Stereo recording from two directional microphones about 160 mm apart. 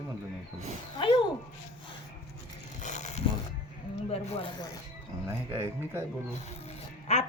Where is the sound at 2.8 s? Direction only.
45° left (ahead or behind).